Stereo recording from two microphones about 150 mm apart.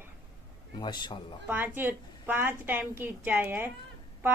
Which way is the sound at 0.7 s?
30° left (ahead or behind).